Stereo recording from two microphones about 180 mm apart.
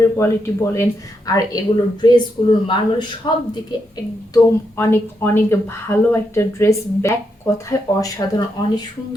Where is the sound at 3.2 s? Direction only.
25° left (ahead or behind).